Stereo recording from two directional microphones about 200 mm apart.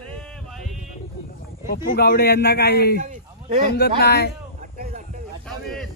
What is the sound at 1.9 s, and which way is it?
Speech, 50° left (ahead or behind).